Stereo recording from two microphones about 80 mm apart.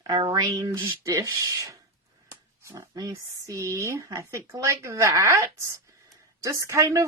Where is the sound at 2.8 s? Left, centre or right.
Right.